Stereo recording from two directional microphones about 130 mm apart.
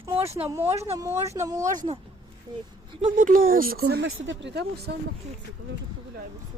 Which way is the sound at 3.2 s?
85° right.